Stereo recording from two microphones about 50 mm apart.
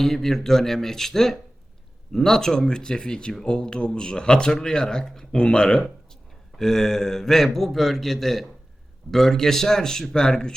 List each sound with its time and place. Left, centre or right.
0.0 s a man's voice: centre